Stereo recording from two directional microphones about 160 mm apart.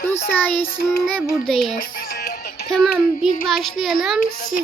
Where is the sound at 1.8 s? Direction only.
75° left (ahead or behind).